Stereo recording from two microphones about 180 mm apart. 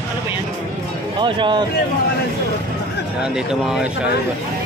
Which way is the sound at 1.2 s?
25° right (ahead or behind).